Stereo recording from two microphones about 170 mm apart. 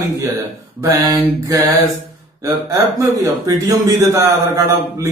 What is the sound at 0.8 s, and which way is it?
A man's voice, 20° right (ahead or behind).